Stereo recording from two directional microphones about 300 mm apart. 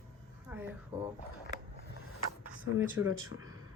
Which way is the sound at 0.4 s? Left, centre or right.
Centre.